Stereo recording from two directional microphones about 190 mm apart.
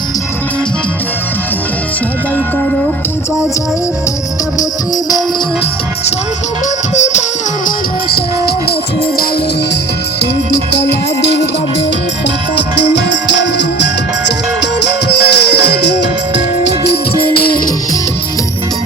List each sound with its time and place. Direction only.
6.9 s music: 40° left (ahead or behind)
8.1 s music: 55° left (ahead or behind)
10.2 s music: 65° left (ahead or behind)
12.5 s music: 65° left (ahead or behind)